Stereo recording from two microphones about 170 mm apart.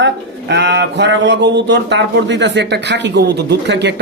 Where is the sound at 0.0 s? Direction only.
90° right.